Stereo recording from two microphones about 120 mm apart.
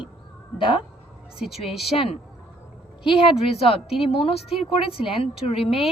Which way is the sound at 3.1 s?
45° left (ahead or behind).